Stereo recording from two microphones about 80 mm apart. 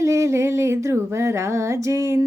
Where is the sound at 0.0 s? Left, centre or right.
Right.